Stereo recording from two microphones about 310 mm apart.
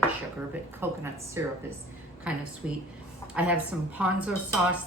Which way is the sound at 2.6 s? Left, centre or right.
Centre.